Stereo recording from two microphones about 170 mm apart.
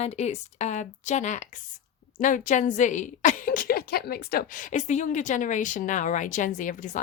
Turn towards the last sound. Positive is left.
turn(degrees=45)  # may be behind; listen again after turning